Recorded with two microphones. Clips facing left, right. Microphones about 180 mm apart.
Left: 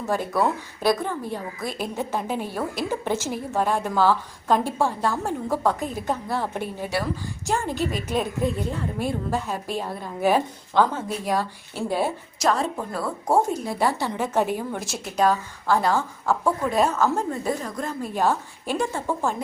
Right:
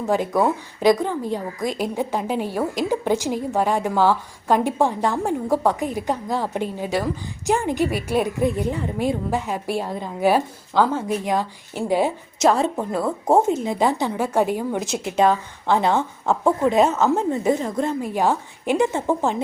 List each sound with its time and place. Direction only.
0.1 s a woman's voice: 15° right (ahead or behind)
12.4 s a woman's voice: 25° right (ahead or behind)
18.0 s a woman's voice: 15° right (ahead or behind)